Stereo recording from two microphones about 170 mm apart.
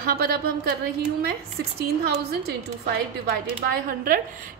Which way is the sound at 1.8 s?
70° right (ahead or behind).